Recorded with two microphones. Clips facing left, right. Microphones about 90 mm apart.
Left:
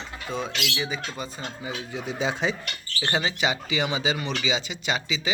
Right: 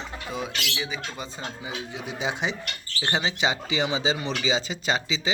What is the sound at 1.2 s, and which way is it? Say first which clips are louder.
Speech: left 1 dB; 20° right (ahead or behind).